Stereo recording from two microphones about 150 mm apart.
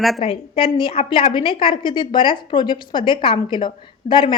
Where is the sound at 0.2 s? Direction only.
40° left (ahead or behind).